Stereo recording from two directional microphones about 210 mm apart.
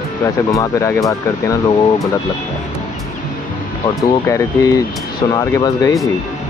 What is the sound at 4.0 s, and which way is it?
Speech, 15° left (ahead or behind).